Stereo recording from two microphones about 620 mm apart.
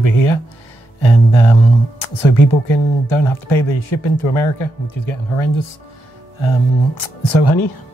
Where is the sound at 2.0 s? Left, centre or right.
Left.